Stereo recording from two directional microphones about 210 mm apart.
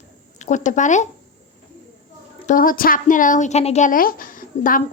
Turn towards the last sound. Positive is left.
turn(degrees=40)  # may be behind; listen again after turning